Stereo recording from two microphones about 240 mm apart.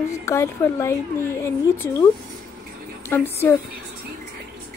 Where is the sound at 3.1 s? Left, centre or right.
Centre.